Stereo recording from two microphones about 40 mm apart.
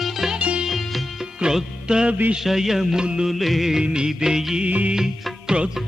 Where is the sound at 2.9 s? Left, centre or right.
Right.